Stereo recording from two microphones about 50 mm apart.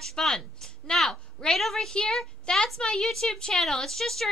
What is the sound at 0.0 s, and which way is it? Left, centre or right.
Speech, centre.